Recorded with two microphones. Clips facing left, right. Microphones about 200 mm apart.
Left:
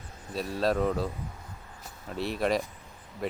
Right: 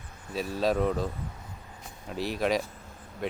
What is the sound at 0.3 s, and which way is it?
Speech, centre (ahead or behind).